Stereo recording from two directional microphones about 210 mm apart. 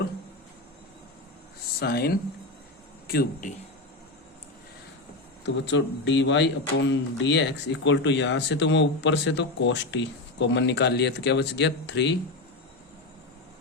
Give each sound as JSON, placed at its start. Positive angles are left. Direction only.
{"t": 1.8, "sound": "speech", "side_deg": 50}
{"t": 5.6, "sound": "speech", "side_deg": 60}